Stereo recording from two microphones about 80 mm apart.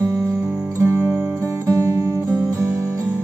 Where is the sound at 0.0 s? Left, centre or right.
Right.